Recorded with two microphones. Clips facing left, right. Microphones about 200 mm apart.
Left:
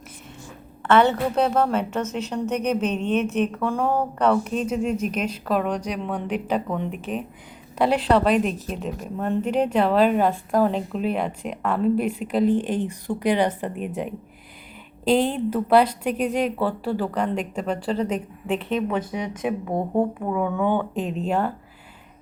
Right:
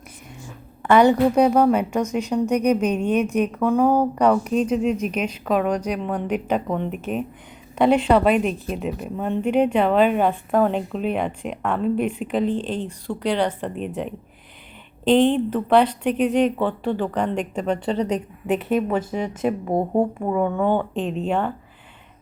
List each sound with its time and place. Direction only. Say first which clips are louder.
0.8 s a woman's voice: right 3 dB; 15° right (ahead or behind)
19.6 s a woman's voice: right 2 dB; 15° right (ahead or behind)
21.0 s a woman's voice: right 1 dB; 5° left (ahead or behind)